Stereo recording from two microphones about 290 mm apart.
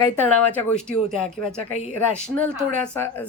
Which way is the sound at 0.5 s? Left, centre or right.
Centre.